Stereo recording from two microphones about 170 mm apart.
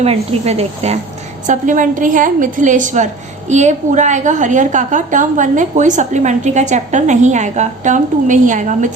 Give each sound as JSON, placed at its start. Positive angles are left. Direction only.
{"t": 0.0, "sound": "a woman's voice", "side_deg": -35}